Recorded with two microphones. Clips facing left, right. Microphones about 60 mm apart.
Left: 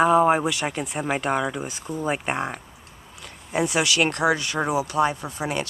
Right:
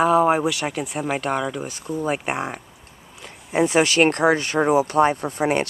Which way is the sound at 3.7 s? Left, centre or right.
Right.